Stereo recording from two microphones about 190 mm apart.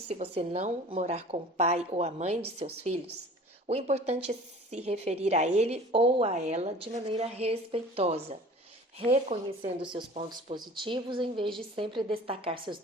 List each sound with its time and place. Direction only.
0.1 s speech: 30° right (ahead or behind)
3.7 s speech: 35° right (ahead or behind)
9.6 s speech: 25° right (ahead or behind)